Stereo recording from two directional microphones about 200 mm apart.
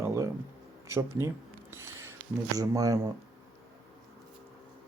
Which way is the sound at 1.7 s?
10° right (ahead or behind).